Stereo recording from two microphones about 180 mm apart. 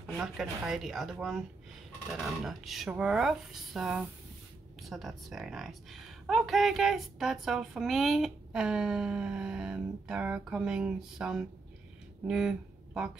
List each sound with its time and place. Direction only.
0.0 s speech: centre (ahead or behind)